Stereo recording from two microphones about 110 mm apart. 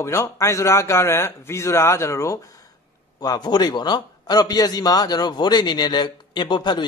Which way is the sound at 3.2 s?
40° left (ahead or behind).